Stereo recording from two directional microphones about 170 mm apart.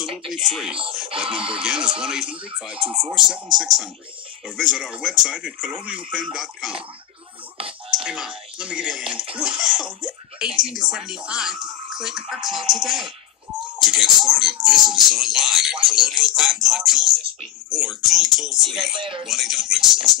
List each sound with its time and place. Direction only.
0.3 s speech: centre (ahead or behind)
8.0 s speech: 5° right (ahead or behind)
18.9 s speech: 30° right (ahead or behind)
19.2 s speech: centre (ahead or behind)